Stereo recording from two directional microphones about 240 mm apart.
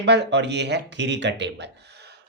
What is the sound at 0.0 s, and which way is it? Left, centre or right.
Speech, right.